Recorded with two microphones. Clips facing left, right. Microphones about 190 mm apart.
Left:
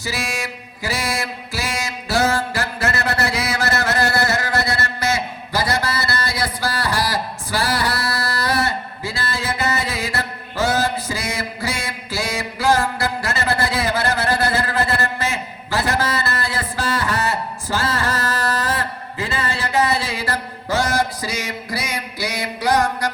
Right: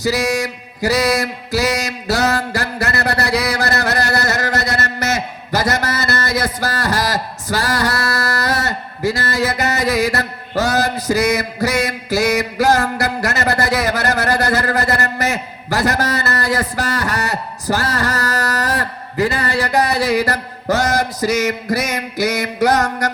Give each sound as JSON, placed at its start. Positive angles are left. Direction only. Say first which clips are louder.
{"t": 0.0, "sound": "mantra", "louder": "right 9 dB", "side_deg": -40}